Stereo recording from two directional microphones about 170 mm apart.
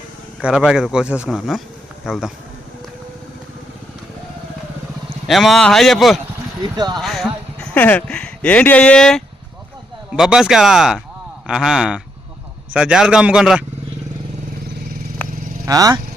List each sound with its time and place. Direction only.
0.4 s speech: 5° right (ahead or behind)
5.3 s speech: centre (ahead or behind)
6.6 s speech: 25° right (ahead or behind)
7.0 s speech: centre (ahead or behind)
15.6 s speech: 20° right (ahead or behind)